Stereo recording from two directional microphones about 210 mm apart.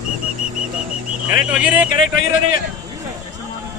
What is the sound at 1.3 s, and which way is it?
Speech, 5° right (ahead or behind).